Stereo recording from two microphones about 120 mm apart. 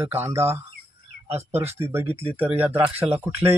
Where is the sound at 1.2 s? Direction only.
60° right (ahead or behind).